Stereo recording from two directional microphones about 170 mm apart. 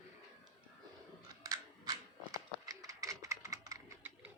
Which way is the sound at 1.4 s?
20° right (ahead or behind).